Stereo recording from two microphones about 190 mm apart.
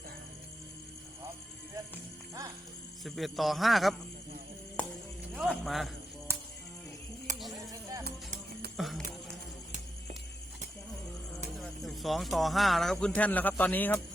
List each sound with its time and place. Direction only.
3.0 s a man's voice: centre (ahead or behind)
4.8 s a sound: 5° left (ahead or behind)
5.3 s a man's voice: centre (ahead or behind)
6.3 s music: 15° right (ahead or behind)
7.3 s a sound: 40° right (ahead or behind)
7.7 s music: 20° right (ahead or behind)
8.0 s music: 55° right (ahead or behind)
8.7 s music: centre (ahead or behind)
11.5 s speech: centre (ahead or behind)